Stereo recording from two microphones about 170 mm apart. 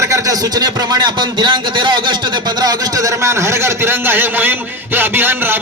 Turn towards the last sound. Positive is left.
turn(degrees=-10)  # may be behind; listen again after turning